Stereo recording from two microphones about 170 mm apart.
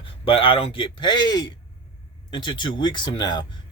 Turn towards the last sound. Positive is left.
turn(degrees=25)  # may be behind; listen again after turning